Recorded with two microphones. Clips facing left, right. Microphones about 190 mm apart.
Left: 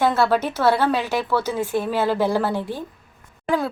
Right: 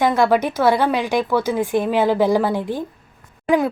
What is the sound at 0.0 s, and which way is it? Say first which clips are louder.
A woman's voice: right 3 dB; 10° right (ahead or behind).